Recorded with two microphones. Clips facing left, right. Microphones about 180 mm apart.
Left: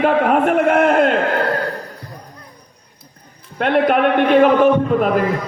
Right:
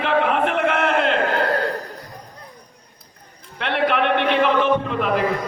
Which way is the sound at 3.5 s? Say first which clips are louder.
Left 6 dB; 45° left (ahead or behind).